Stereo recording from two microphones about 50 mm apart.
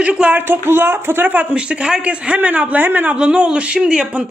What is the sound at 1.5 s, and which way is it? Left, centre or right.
Speech, right.